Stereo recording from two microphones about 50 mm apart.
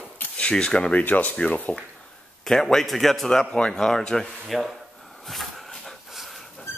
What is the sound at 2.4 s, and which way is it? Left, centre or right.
A man's voice, centre.